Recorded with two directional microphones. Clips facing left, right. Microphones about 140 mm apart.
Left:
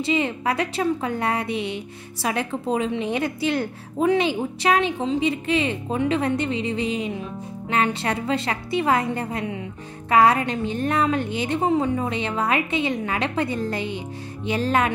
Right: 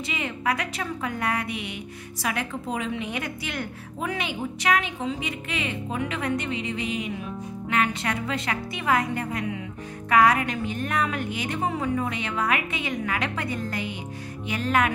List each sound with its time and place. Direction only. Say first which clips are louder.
0.0 s a woman's voice: left 6 dB; 30° left (ahead or behind)